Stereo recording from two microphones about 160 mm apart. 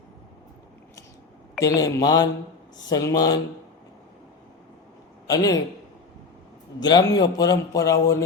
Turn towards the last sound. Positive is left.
turn(degrees=20)  # may be behind; listen again after turning